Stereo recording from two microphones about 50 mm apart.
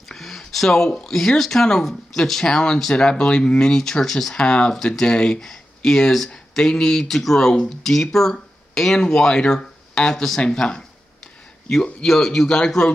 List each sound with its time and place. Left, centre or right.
0.1 s speech: centre